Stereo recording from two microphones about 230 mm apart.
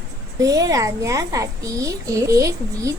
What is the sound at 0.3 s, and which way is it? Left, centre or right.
A child's voice, centre.